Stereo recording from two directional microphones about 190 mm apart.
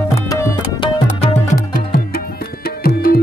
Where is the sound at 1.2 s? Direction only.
45° left (ahead or behind).